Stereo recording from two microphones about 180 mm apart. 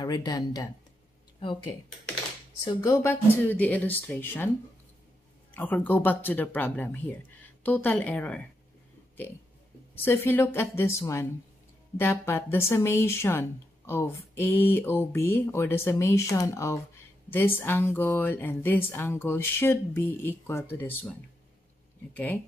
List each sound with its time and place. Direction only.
0.0 s speech: 25° left (ahead or behind)
5.5 s speech: 10° left (ahead or behind)
9.9 s speech: 10° left (ahead or behind)